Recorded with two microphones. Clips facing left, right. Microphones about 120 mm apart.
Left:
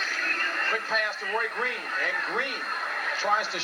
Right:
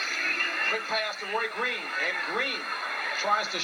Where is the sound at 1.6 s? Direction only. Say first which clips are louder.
Left 1 dB; 30° left (ahead or behind).